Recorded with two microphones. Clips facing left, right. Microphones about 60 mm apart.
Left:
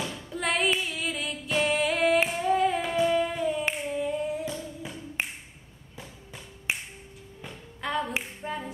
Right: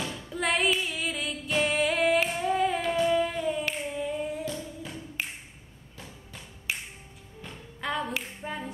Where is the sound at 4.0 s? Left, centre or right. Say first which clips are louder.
Left 2 dB; centre.